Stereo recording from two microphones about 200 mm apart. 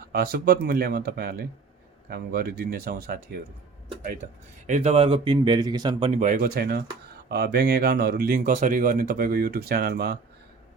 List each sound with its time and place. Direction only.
0.1 s speech: 50° right (ahead or behind)
4.6 s speech: 35° right (ahead or behind)
6.1 s speech: 40° right (ahead or behind)